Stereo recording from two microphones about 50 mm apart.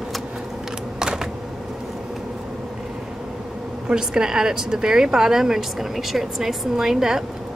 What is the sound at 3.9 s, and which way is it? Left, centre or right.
A woman's voice, centre.